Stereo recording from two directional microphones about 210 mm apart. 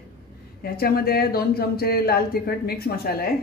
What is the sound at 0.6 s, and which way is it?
Speech, 45° left (ahead or behind).